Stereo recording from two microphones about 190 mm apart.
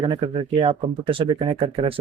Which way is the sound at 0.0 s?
25° right (ahead or behind).